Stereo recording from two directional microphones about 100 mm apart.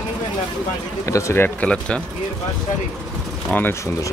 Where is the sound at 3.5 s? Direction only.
20° left (ahead or behind).